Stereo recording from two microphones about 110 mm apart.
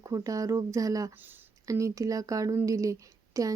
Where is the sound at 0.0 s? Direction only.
30° right (ahead or behind).